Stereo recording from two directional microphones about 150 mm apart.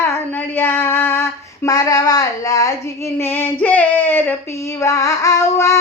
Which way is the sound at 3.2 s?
15° left (ahead or behind).